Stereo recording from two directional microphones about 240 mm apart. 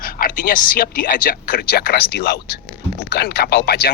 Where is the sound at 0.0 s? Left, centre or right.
Left.